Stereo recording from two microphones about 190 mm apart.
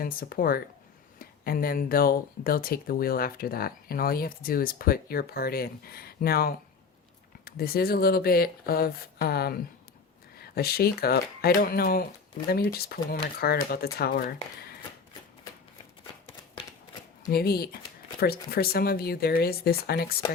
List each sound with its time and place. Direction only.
0.0 s speech: 50° left (ahead or behind)
16.6 s shuffling cards: 25° left (ahead or behind)
17.2 s speech: 55° left (ahead or behind)